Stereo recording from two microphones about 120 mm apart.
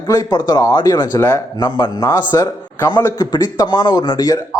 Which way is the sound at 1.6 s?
35° left (ahead or behind).